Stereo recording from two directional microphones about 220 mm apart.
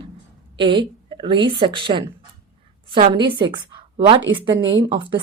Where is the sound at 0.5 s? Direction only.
20° right (ahead or behind).